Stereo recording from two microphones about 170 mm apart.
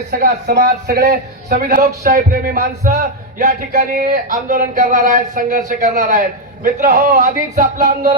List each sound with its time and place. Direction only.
0.1 s speech: 65° right (ahead or behind)
1.5 s speech: 50° right (ahead or behind)
1.9 s music: 60° right (ahead or behind)
3.9 s speech: 60° right (ahead or behind)